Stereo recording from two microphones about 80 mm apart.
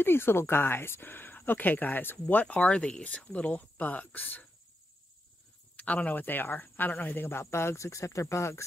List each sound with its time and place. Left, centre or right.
0.0 s speech: left
5.8 s speech: centre; by 8.6 s left